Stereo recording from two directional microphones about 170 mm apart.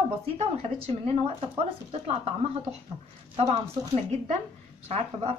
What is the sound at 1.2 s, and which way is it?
Speech, 35° right (ahead or behind).